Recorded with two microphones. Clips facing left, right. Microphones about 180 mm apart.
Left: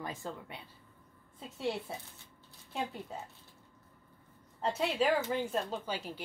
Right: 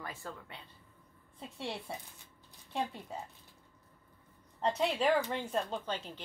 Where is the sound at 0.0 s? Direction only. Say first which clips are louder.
Left 4 dB; 20° left (ahead or behind).